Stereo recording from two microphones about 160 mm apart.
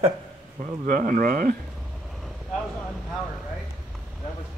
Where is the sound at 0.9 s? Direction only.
60° right (ahead or behind).